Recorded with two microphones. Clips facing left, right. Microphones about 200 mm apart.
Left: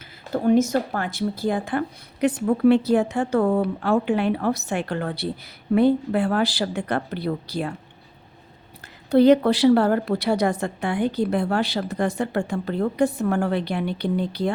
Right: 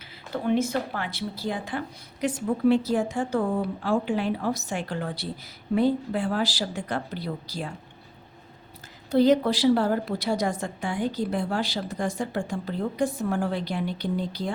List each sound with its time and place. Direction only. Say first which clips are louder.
0.3 s speech: left 6 dB; 45° left (ahead or behind)
2.2 s a woman's voice: left 5 dB; 65° left (ahead or behind)
9.0 s a woman's voice: left 5 dB; 60° left (ahead or behind)